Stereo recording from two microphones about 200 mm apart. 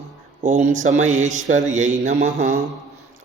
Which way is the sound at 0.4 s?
35° right (ahead or behind).